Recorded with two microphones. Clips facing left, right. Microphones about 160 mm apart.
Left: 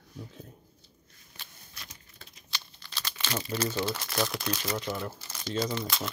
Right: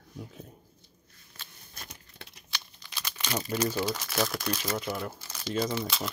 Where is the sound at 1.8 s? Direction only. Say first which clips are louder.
Right 4 dB; 65° right (ahead or behind).